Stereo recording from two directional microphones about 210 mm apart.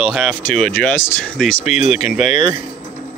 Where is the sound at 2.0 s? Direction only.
35° left (ahead or behind).